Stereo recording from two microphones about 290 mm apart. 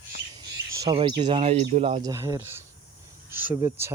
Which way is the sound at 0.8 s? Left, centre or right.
Centre.